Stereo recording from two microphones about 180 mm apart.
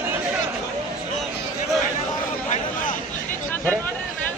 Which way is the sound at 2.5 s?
50° left (ahead or behind).